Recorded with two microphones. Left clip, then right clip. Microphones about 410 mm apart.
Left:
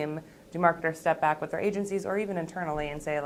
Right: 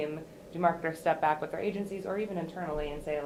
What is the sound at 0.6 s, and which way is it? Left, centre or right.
A woman's voice, left.